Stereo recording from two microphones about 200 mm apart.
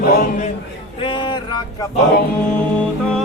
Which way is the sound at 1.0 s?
25° left (ahead or behind).